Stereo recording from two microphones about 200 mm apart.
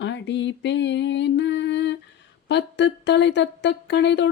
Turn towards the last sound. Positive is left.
turn(degrees=60)  # may be behind; listen again after turning